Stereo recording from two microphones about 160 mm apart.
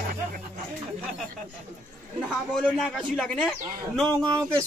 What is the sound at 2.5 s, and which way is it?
A man's voice, centre (ahead or behind).